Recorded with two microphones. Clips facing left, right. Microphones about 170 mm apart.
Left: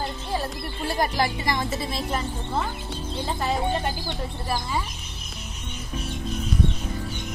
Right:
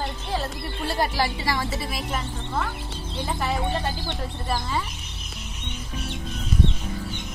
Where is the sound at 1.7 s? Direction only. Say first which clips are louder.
Left 1 dB; 5° right (ahead or behind).